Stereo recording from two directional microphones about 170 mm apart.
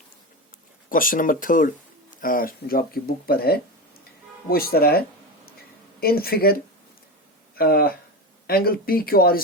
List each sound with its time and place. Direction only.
0.9 s speech: 55° left (ahead or behind)